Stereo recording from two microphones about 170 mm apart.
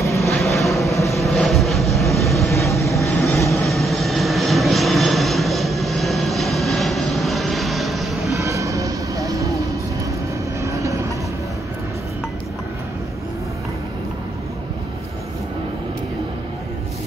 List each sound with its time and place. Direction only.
0.0 s vehicle: 15° left (ahead or behind)
0.3 s vehicle: centre (ahead or behind)
8.3 s music: 20° right (ahead or behind)
10.6 s vehicle: 20° right (ahead or behind)